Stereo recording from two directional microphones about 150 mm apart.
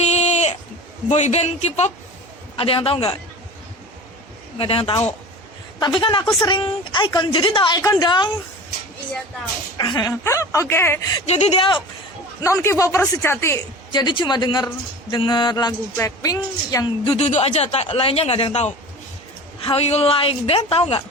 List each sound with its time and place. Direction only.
0.0 s a sound: 45° left (ahead or behind)
1.1 s a man's voice: 45° left (ahead or behind)
4.5 s speech: 40° left (ahead or behind)
7.8 s speech: 20° left (ahead or behind)
9.7 s speech: 25° left (ahead or behind)
11.3 s speech: 45° left (ahead or behind)
12.4 s speech: 20° left (ahead or behind)
13.9 s speech: 30° left (ahead or behind)
17.2 s a man's voice: 45° left (ahead or behind)